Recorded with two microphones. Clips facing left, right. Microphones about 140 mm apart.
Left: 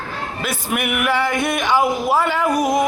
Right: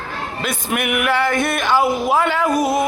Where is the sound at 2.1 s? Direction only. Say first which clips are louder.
Even; 10° left (ahead or behind).